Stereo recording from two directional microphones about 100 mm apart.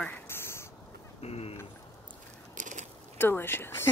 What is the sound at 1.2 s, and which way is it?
Speech, 90° left.